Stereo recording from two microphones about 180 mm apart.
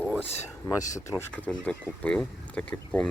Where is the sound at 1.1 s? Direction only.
10° left (ahead or behind).